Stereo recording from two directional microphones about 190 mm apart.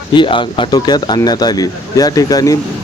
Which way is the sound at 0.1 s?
25° left (ahead or behind).